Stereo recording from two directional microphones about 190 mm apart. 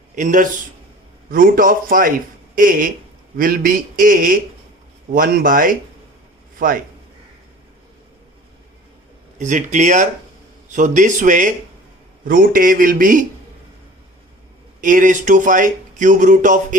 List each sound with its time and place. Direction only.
0.2 s speech: 45° right (ahead or behind)
9.4 s speech: 40° right (ahead or behind)
14.8 s speech: 45° right (ahead or behind)